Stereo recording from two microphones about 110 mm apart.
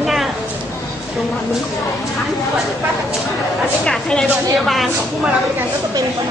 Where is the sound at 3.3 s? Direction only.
Centre (ahead or behind).